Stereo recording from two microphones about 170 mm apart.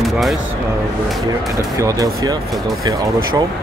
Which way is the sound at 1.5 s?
20° right (ahead or behind).